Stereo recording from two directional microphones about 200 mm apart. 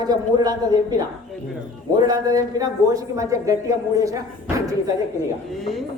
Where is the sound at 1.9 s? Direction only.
20° right (ahead or behind).